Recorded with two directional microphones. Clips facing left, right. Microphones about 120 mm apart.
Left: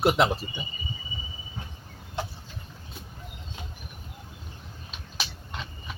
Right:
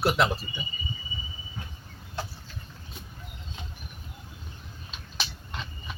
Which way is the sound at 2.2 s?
20° left (ahead or behind).